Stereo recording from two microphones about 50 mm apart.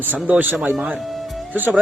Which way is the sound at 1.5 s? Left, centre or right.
Right.